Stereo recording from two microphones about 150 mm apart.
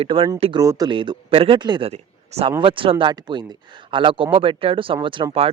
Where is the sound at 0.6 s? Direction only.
25° right (ahead or behind).